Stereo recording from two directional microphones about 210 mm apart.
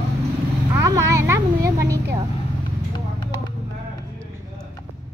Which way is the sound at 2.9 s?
20° left (ahead or behind).